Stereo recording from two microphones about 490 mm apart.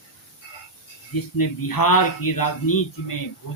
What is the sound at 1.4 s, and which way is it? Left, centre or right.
Speech, left.